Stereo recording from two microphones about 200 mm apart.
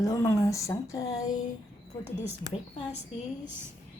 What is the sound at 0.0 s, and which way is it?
A woman's voice, 15° left (ahead or behind).